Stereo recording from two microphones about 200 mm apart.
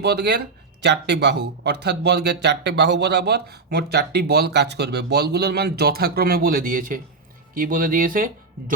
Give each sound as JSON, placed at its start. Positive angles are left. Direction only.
{"t": 0.0, "sound": "speech", "side_deg": -55}